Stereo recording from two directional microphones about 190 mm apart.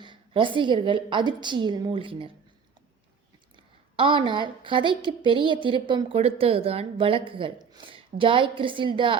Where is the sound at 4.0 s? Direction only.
25° right (ahead or behind).